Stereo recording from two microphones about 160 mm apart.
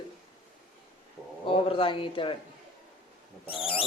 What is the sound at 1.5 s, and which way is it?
Speech, 35° left (ahead or behind).